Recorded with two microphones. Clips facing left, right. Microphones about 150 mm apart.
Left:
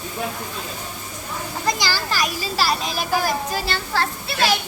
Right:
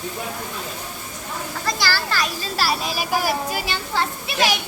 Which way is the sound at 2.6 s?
5° right (ahead or behind).